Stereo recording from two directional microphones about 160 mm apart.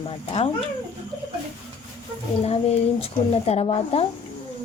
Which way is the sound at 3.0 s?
40° left (ahead or behind).